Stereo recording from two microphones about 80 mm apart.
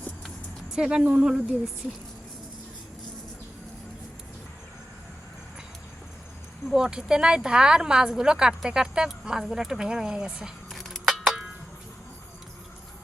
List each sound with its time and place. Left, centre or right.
0.7 s a woman's voice: centre
6.7 s a woman's voice: centre
10.7 s a sound: centre